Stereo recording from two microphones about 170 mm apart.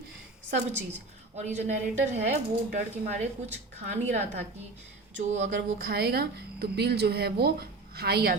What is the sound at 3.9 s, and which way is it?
Speech, 45° right (ahead or behind).